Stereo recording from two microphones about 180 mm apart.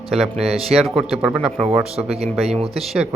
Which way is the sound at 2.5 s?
30° right (ahead or behind).